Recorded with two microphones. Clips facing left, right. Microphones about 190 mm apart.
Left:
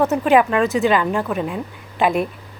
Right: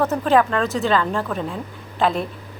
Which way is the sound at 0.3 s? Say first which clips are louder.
Left 2 dB; 10° left (ahead or behind).